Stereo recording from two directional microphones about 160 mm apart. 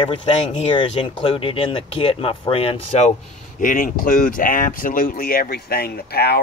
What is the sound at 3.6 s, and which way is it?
Speech, 60° left (ahead or behind).